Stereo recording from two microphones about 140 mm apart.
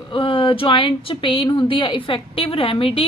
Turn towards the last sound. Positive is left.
turn(degrees=40)  # may be behind; listen again after turning